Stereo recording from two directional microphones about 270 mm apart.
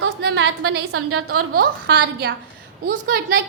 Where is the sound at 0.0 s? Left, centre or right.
Right.